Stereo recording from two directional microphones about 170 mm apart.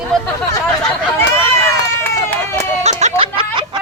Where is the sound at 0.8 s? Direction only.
15° left (ahead or behind).